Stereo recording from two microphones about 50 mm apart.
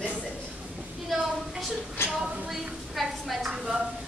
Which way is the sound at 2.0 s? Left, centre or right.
Left.